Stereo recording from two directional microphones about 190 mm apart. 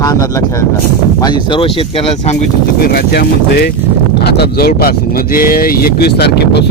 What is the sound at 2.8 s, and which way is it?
Speech, 55° left (ahead or behind).